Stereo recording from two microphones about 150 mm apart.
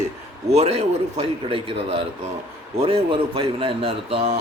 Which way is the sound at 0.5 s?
45° right (ahead or behind).